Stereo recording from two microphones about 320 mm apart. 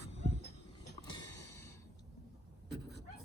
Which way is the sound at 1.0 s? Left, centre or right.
Centre.